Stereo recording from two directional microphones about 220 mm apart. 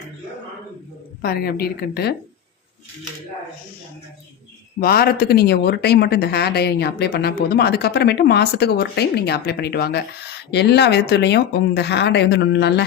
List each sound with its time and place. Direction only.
1.2 s speech: 45° left (ahead or behind)
4.8 s speech: 45° left (ahead or behind)